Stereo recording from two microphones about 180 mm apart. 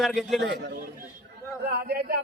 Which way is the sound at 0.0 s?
Centre (ahead or behind).